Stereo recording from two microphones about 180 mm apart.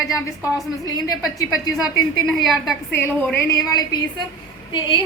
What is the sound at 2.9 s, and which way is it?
A woman's voice, 10° left (ahead or behind).